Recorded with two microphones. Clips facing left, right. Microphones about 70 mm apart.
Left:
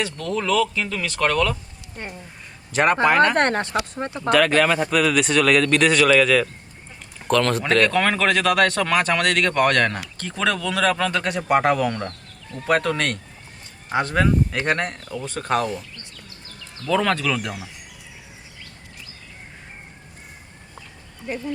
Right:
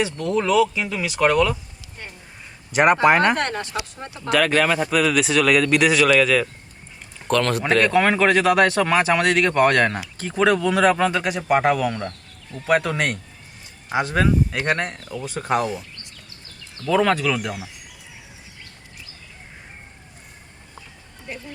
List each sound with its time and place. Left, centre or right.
0.0 s a man's voice: centre
2.7 s speech: centre
3.3 s speech: left
4.3 s a man's voice: centre
16.8 s a man's voice: centre